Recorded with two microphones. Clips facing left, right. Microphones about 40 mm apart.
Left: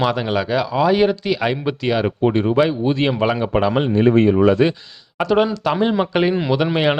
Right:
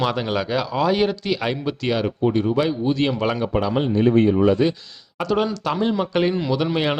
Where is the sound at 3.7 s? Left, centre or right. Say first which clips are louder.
Left 2 dB; left.